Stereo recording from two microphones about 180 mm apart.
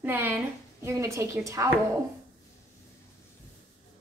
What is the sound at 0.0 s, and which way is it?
A woman's voice, 10° right (ahead or behind).